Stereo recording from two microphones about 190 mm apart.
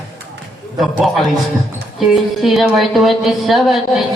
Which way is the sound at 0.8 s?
Centre (ahead or behind).